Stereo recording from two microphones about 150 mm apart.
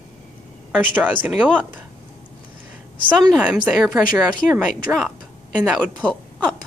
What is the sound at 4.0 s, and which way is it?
Speech, 65° left (ahead or behind).